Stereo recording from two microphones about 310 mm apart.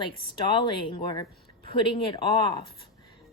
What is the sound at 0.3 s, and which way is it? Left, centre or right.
Speech, centre.